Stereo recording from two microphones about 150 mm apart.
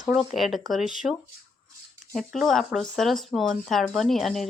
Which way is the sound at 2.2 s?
Centre (ahead or behind).